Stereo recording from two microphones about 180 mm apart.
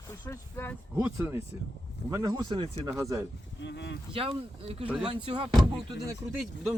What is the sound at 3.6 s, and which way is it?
Speech, 75° left (ahead or behind).